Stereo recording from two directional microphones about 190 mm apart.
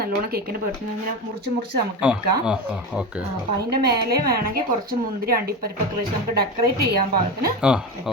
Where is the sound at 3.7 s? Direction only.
55° right (ahead or behind).